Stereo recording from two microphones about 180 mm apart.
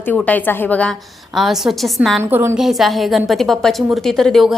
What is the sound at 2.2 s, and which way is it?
Speech, 15° right (ahead or behind).